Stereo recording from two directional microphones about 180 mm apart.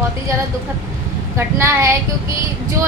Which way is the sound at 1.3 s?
15° right (ahead or behind).